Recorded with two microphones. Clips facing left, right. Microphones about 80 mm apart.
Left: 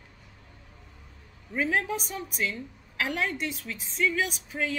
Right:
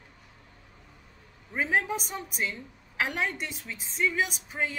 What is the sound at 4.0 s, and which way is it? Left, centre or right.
Speech, right.